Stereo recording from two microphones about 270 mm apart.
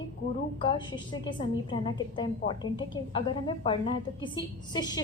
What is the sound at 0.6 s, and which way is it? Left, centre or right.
A woman's voice, centre.